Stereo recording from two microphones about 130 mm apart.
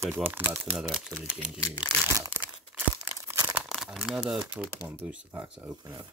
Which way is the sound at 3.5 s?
Centre (ahead or behind).